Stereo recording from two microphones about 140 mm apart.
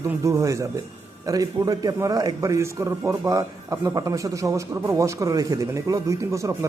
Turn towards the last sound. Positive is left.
turn(degrees=-20)  # may be behind; listen again after turning